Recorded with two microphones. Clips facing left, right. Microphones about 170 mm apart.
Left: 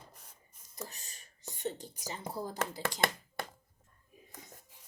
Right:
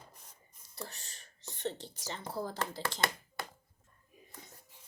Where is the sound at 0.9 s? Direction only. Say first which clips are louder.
Right 1 dB; 15° left (ahead or behind).